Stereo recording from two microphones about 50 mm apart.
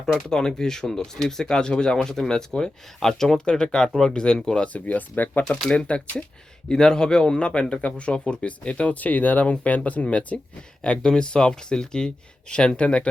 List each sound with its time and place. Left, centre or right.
0.0 s speech: centre
4.6 s speech: left
5.5 s speech: centre
5.7 s a man's voice: left
6.7 s a man's voice: centre